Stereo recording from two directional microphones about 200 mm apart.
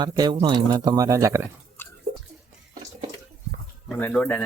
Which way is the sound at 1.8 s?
10° left (ahead or behind).